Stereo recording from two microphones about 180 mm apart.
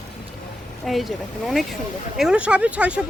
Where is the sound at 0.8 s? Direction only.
Centre (ahead or behind).